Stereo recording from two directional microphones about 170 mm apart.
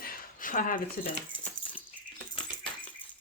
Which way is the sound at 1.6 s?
30° left (ahead or behind).